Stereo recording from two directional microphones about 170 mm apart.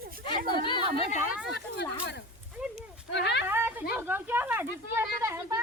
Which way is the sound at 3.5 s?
10° right (ahead or behind).